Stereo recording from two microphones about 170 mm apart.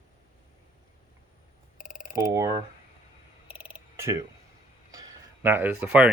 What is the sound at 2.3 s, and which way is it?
Speech, 20° right (ahead or behind).